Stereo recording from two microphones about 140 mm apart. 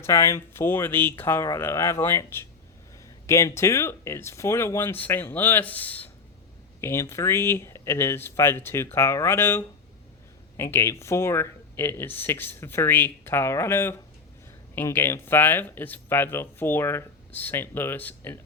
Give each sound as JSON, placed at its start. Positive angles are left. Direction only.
{"t": 0.0, "sound": "speech", "side_deg": 20}